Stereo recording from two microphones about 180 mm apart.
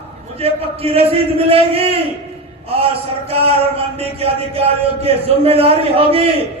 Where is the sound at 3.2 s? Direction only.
35° right (ahead or behind).